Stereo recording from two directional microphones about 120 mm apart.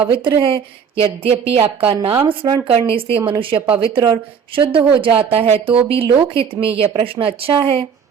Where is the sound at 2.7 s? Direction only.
50° right (ahead or behind).